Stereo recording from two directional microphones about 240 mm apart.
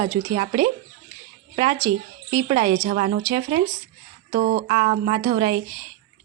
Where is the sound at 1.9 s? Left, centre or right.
Right.